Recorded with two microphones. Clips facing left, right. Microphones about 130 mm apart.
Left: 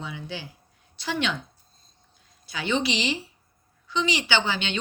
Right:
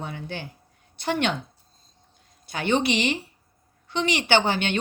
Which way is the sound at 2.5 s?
55° right (ahead or behind).